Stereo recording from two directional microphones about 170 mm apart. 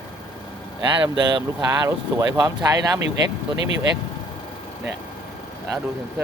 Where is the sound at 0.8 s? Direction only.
25° right (ahead or behind).